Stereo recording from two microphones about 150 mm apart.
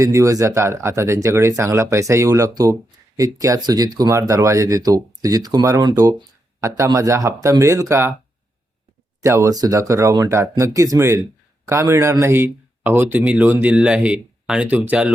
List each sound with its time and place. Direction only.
0.0 s speech: 20° right (ahead or behind)
9.2 s speech: 20° right (ahead or behind)